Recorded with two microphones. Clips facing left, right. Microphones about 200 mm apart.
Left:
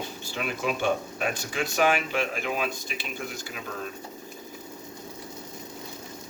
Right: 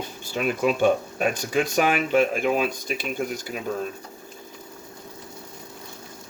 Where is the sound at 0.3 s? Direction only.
50° right (ahead or behind).